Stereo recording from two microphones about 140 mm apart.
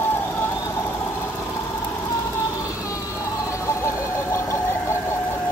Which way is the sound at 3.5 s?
20° left (ahead or behind).